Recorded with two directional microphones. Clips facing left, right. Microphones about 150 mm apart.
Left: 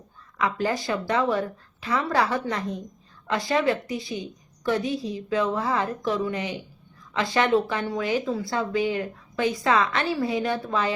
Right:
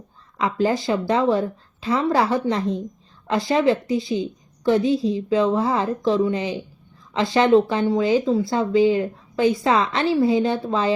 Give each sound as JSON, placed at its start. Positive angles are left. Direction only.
{"t": 0.3, "sound": "a woman's voice", "side_deg": -25}